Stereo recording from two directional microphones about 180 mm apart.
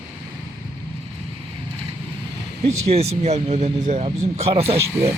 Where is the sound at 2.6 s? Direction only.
35° right (ahead or behind).